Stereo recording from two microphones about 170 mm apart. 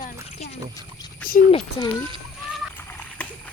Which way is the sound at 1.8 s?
25° left (ahead or behind).